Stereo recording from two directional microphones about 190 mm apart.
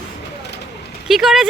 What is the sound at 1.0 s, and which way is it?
Speech, centre (ahead or behind).